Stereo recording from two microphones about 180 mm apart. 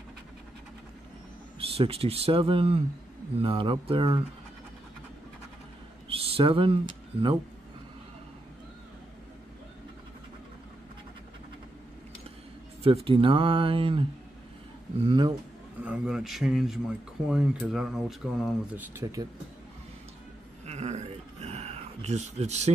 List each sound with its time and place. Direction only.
1.8 s speech: 35° right (ahead or behind)
6.0 s speech: 30° right (ahead or behind)
12.8 s speech: 30° right (ahead or behind)
15.8 s speech: 5° right (ahead or behind)
20.6 s a sound: 40° right (ahead or behind)